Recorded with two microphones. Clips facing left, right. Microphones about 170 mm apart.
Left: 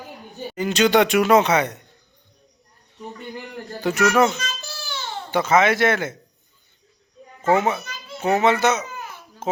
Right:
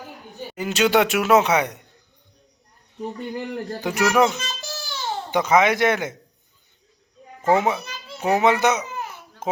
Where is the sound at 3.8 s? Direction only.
15° right (ahead or behind).